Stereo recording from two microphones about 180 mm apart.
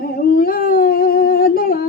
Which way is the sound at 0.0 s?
55° left (ahead or behind).